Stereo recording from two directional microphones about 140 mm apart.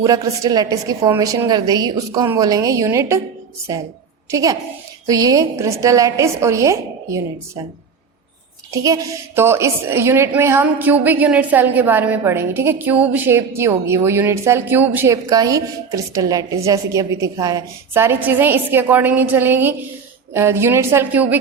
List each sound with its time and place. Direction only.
0.0 s a woman's voice: 25° right (ahead or behind)
8.7 s a woman's voice: 25° right (ahead or behind)